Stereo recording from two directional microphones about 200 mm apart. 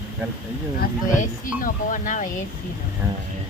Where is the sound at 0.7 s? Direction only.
45° left (ahead or behind).